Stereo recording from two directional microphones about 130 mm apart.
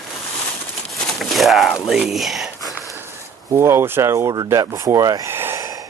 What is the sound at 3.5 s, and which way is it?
Speech, 20° right (ahead or behind).